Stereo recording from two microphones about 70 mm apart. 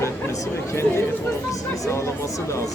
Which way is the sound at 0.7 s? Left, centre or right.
Left.